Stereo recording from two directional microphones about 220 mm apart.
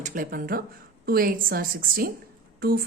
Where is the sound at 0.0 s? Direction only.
40° right (ahead or behind).